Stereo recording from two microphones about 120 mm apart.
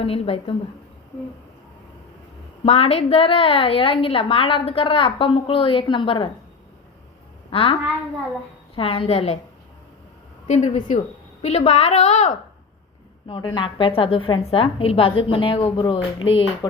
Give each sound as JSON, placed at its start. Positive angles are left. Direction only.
{"t": 0.0, "sound": "a woman's voice", "side_deg": 50}
{"t": 2.6, "sound": "a woman's voice", "side_deg": 55}
{"t": 7.5, "sound": "a woman's voice", "side_deg": 50}
{"t": 10.4, "sound": "a woman's voice", "side_deg": 75}
{"t": 11.4, "sound": "a woman's voice", "side_deg": 65}
{"t": 13.2, "sound": "a woman's voice", "side_deg": 40}